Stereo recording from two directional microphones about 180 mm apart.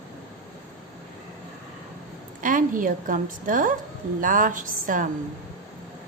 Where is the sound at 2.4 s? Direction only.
50° right (ahead or behind).